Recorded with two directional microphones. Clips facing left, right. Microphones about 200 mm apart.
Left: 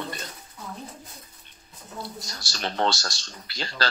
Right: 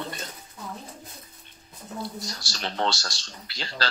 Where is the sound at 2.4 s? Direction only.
45° left (ahead or behind).